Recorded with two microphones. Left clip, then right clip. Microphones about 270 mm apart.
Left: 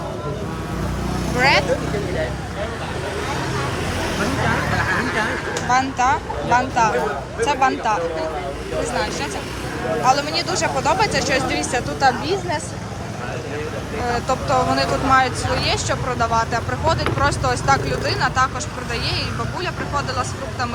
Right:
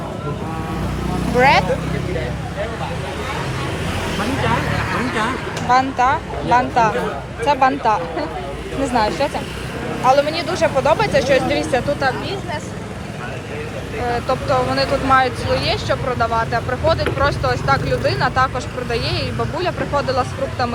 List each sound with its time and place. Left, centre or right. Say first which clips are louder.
1.4 s speech: right 3 dB; centre
5.6 s speech: right 3 dB; centre
14.1 s speech: right 1 dB; centre